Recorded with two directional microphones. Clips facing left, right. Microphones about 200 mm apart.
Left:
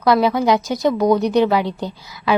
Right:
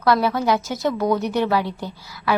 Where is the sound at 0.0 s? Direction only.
15° left (ahead or behind).